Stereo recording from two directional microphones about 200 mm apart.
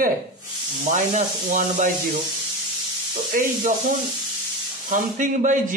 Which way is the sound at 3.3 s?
45° right (ahead or behind).